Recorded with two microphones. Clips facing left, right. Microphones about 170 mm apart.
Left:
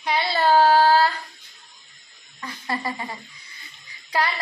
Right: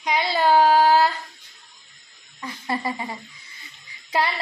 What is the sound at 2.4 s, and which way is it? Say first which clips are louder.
A woman's voice: right 2 dB; 20° right (ahead or behind).